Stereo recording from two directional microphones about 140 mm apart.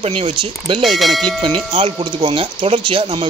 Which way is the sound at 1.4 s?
35° right (ahead or behind).